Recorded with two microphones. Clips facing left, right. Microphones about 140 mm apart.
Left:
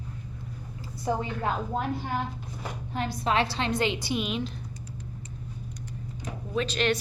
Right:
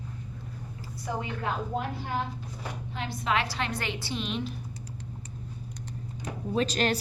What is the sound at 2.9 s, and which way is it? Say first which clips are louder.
A woman's voice: left 3 dB; 40° left (ahead or behind).